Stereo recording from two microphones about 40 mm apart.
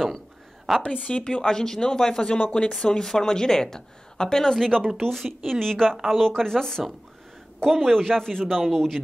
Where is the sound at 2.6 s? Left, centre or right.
Centre.